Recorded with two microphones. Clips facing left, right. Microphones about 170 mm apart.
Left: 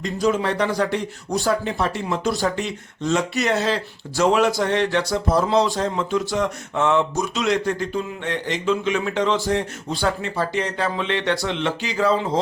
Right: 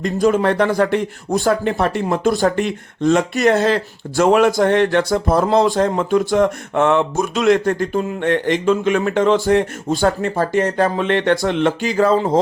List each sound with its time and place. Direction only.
0.0 s speech: 50° right (ahead or behind)